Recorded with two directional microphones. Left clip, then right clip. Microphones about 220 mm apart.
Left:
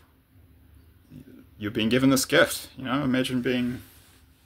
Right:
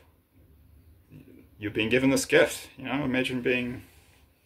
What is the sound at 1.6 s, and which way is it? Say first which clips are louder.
Speech: left 1 dB; 55° left (ahead or behind).